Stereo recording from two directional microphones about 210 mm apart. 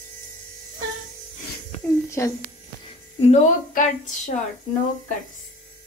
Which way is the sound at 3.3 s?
35° left (ahead or behind).